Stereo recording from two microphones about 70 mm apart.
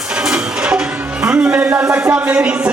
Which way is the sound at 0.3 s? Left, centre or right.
Centre.